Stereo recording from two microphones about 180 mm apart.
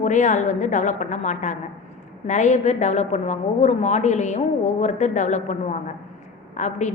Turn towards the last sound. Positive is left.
turn(degrees=40)  # may be behind; listen again after turning